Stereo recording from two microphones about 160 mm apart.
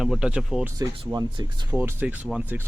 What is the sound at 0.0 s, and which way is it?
Speech, 5° right (ahead or behind).